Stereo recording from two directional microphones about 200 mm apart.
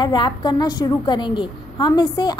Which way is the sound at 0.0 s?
20° left (ahead or behind).